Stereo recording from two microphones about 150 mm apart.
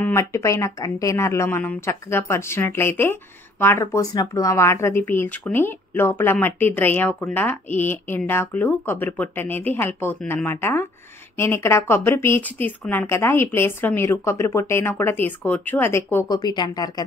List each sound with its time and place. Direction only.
0.0 s speech: 20° left (ahead or behind)
16.3 s speech: 30° left (ahead or behind)